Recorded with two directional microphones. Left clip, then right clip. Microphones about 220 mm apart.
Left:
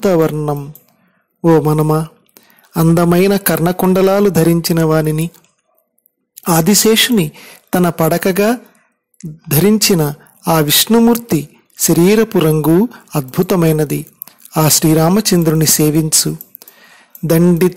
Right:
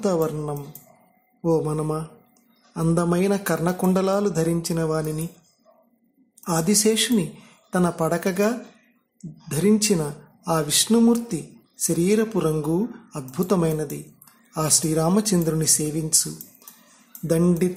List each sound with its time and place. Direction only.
0.0 s speech: 35° left (ahead or behind)
6.3 s speech: 40° left (ahead or behind)